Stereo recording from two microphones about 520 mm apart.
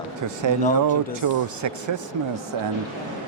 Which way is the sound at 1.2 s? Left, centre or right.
Right.